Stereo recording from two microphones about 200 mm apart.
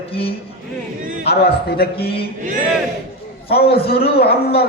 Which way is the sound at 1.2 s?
55° left (ahead or behind).